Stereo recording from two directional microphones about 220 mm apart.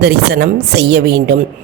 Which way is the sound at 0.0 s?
50° right (ahead or behind).